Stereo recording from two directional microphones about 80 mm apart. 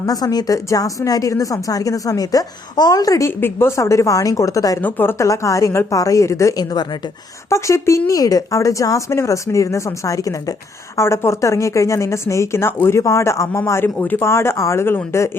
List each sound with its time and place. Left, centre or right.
0.0 s a woman's voice: left
3.2 s a woman's voice: left
4.8 s speech: left
5.1 s speech: left